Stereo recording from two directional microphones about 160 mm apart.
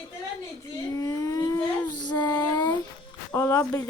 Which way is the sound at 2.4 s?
25° left (ahead or behind).